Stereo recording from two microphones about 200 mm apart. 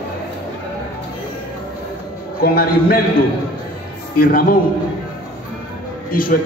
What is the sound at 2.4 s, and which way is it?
Speech, 45° left (ahead or behind).